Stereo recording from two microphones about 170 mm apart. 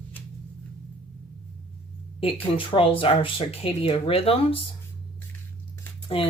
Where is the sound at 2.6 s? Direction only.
30° left (ahead or behind).